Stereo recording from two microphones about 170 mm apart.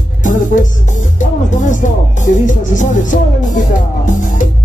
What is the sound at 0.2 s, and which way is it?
Speech, 50° left (ahead or behind).